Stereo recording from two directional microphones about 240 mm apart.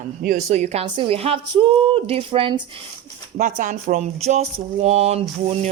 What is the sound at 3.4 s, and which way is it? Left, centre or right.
Speech, right.